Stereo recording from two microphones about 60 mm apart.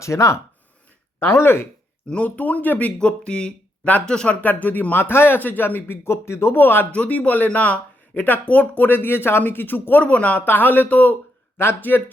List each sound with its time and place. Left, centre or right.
0.0 s speech: left
1.2 s speech: left
2.0 s speech: left
3.0 s speech: centre
4.4 s speech: left
6.1 s speech: left
6.9 s speech: left